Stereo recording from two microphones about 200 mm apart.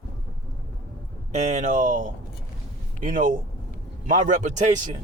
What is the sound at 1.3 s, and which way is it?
Speech, 35° right (ahead or behind).